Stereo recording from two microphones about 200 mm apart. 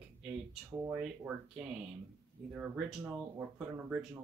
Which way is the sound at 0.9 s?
5° right (ahead or behind).